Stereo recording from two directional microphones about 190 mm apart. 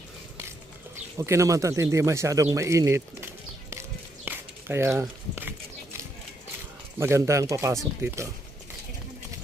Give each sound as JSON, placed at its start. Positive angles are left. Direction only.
{"t": 1.2, "sound": "speech", "side_deg": -15}
{"t": 4.3, "sound": "a sound", "side_deg": -15}
{"t": 7.0, "sound": "speech", "side_deg": -15}